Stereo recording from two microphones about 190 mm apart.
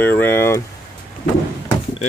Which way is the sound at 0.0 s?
10° left (ahead or behind).